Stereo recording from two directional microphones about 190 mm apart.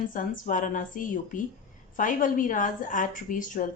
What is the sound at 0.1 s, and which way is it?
A woman's voice, 45° left (ahead or behind).